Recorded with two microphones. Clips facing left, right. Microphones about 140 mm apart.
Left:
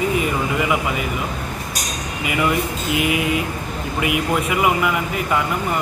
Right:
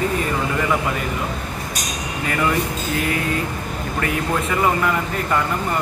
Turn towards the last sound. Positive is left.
turn(degrees=10)  # may be behind; listen again after turning